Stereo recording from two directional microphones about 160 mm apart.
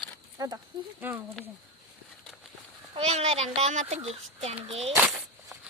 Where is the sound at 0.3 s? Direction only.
20° right (ahead or behind).